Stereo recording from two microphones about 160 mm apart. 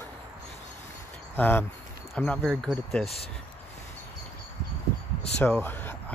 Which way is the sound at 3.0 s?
40° left (ahead or behind).